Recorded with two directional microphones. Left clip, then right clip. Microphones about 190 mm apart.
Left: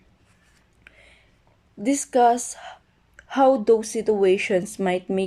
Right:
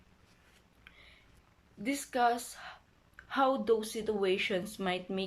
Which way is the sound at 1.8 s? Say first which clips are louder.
Left 12 dB; 35° left (ahead or behind).